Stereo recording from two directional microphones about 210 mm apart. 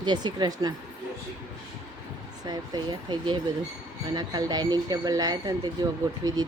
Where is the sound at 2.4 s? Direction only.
20° right (ahead or behind).